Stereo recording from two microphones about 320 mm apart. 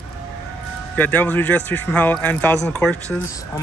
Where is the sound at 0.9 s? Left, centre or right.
Centre.